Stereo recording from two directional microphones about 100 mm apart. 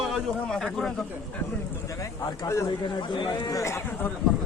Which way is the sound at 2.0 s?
30° left (ahead or behind).